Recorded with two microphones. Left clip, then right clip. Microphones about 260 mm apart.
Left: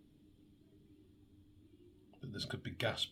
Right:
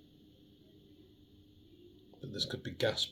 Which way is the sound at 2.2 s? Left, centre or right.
Left.